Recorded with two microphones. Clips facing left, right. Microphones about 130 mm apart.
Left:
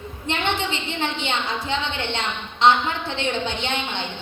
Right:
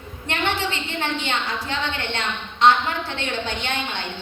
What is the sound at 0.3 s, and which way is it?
A woman's voice, 20° left (ahead or behind).